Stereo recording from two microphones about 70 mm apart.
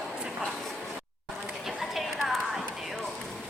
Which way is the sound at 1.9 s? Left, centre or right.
Centre.